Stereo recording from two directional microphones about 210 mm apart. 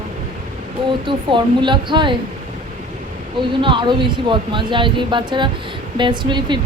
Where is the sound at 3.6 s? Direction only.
20° right (ahead or behind).